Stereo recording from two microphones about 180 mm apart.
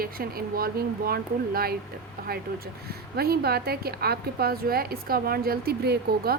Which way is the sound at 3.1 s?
60° right (ahead or behind).